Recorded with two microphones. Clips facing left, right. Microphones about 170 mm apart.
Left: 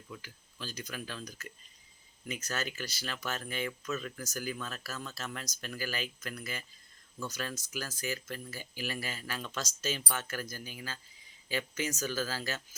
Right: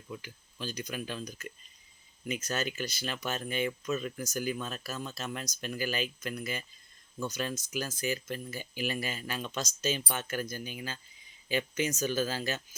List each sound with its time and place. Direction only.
0.1 s speech: 20° right (ahead or behind)